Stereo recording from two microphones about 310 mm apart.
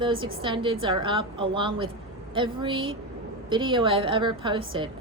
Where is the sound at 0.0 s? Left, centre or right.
Centre.